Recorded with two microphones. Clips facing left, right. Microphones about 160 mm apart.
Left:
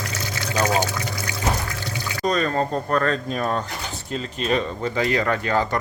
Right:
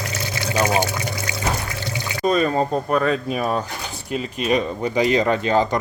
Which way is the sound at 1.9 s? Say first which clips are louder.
Right 3 dB; 10° right (ahead or behind).